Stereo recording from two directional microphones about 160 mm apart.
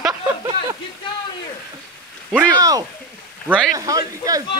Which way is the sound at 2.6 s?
20° right (ahead or behind).